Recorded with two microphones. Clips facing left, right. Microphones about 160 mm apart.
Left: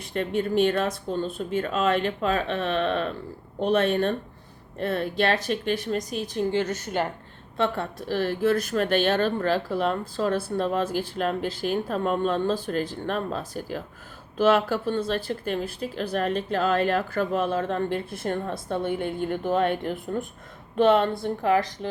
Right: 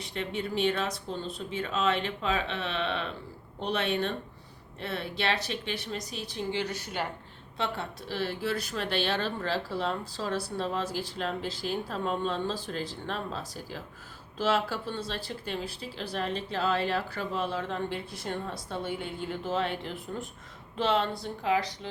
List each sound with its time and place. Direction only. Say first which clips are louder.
0.0 s speech: left 7 dB; 50° left (ahead or behind)